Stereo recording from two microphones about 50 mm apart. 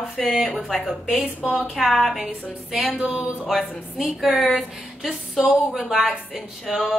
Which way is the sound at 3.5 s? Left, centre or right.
Centre.